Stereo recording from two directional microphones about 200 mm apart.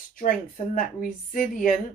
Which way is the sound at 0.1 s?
40° left (ahead or behind).